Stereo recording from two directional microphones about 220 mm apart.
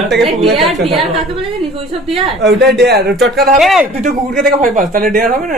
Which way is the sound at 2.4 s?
50° right (ahead or behind).